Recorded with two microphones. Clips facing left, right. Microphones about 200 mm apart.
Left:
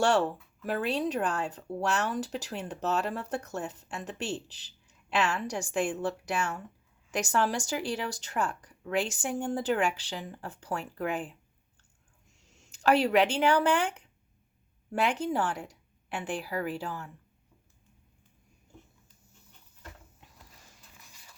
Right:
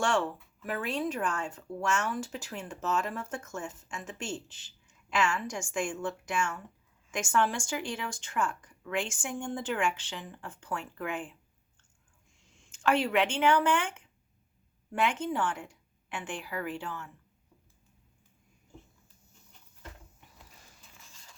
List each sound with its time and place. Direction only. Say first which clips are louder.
0.0 s speech: left 4 dB; 35° left (ahead or behind)
12.4 s speech: left 1 dB; 40° left (ahead or behind)